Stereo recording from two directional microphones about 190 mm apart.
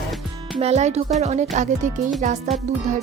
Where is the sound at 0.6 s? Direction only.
35° right (ahead or behind).